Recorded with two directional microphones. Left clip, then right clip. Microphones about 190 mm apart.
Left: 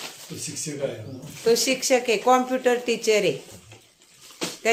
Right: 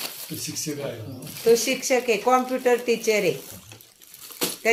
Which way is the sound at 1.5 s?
10° left (ahead or behind).